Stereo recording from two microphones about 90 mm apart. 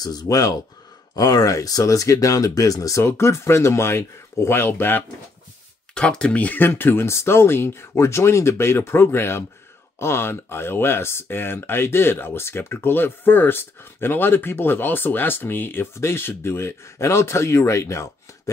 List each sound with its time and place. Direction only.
0.0 s speech: 45° left (ahead or behind)
3.0 s speech: 30° left (ahead or behind)
5.9 s speech: 10° left (ahead or behind); by 18.1 s 35° left (ahead or behind)